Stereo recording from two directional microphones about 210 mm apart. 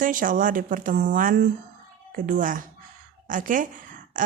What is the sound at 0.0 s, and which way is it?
A woman's voice, 40° right (ahead or behind).